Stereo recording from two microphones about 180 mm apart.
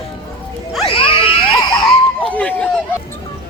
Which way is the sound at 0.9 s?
30° left (ahead or behind).